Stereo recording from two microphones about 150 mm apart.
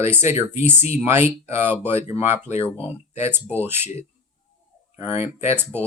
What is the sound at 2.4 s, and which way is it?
Speech, 40° left (ahead or behind).